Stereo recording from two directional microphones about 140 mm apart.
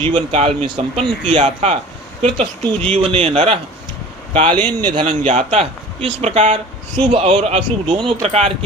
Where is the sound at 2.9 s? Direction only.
40° right (ahead or behind).